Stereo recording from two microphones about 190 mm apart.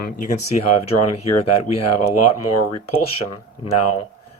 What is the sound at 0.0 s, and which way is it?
Speech, 40° left (ahead or behind).